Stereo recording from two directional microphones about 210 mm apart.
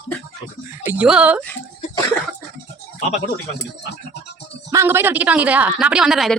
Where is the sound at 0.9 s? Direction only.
5° right (ahead or behind).